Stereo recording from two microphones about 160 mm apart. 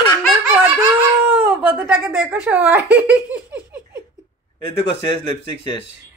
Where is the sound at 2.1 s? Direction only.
5° right (ahead or behind).